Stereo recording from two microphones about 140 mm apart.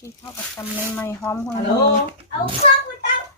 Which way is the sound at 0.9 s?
15° left (ahead or behind).